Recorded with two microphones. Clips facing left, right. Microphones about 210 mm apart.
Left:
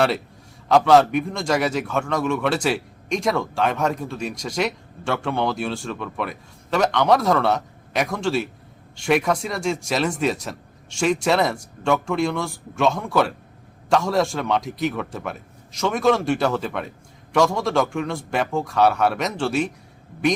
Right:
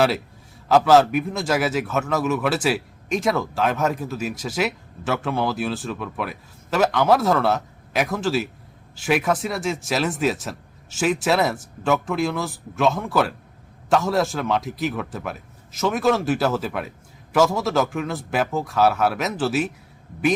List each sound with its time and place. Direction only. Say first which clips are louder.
0.7 s a man's voice: even; centre (ahead or behind)